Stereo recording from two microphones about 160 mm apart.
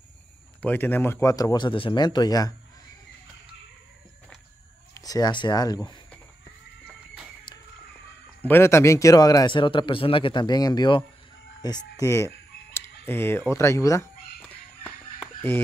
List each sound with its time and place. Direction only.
0.6 s speech: 10° left (ahead or behind)
4.9 s speech: 25° left (ahead or behind)
8.4 s speech: 15° left (ahead or behind)
12.7 s fowl: 15° left (ahead or behind)
13.5 s speech: 15° left (ahead or behind)